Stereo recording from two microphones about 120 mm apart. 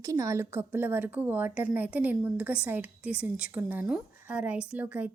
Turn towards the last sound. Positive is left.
turn(degrees=-10)  # may be behind; listen again after turning